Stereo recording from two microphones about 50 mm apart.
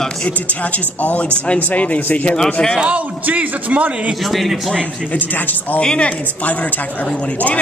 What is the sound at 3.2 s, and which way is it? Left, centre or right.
Speech, right.